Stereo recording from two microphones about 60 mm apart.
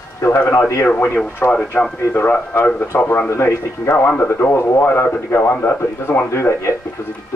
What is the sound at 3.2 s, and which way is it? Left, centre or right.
Speech, left.